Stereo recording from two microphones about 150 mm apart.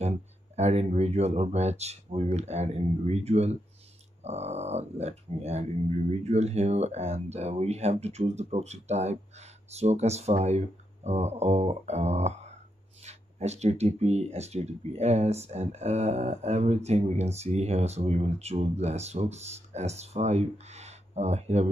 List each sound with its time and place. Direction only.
0.6 s speech: 45° right (ahead or behind)